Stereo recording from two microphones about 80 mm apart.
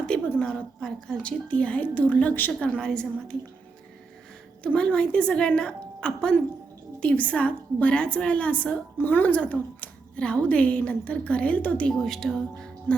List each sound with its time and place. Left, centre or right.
0.1 s a sound: centre
0.4 s a woman's voice: centre
2.5 s a woman's voice: centre
4.6 s a woman's voice: centre